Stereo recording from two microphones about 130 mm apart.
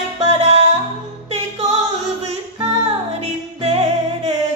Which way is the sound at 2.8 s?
55° right (ahead or behind).